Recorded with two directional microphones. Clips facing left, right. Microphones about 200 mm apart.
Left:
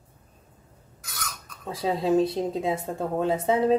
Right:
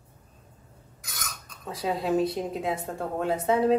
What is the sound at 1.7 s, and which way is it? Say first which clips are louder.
A woman's voice: left 3 dB; 25° left (ahead or behind).